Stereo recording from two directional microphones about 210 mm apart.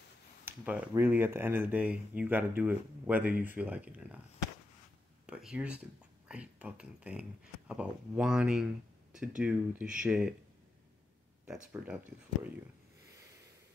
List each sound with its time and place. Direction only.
0.5 s speech: 10° right (ahead or behind)
5.2 s speech: 5° right (ahead or behind)
11.4 s speech: 5° right (ahead or behind)